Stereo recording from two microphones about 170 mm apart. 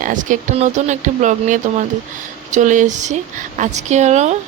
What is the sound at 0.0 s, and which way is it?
Speech, 50° right (ahead or behind).